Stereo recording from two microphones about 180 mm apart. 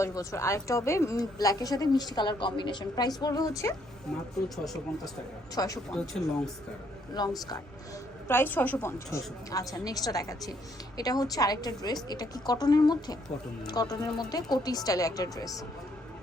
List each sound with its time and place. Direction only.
0.0 s speech: 15° left (ahead or behind)
4.1 s speech: centre (ahead or behind)
5.5 s speech: 20° left (ahead or behind)
5.9 s speech: 5° left (ahead or behind)
7.1 s speech: 20° left (ahead or behind)
8.3 s speech: 10° left (ahead or behind)